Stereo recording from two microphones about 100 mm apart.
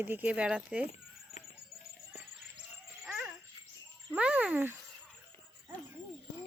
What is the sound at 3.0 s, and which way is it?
Music, centre (ahead or behind).